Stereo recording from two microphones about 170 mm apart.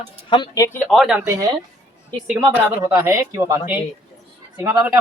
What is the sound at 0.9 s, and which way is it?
Speech, centre (ahead or behind).